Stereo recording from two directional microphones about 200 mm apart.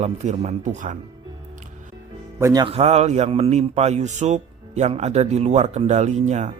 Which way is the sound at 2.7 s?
30° right (ahead or behind).